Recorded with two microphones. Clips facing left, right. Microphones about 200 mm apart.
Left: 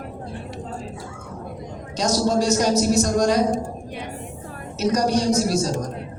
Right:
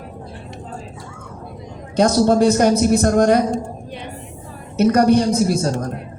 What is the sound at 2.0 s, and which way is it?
A woman's voice, 55° right (ahead or behind).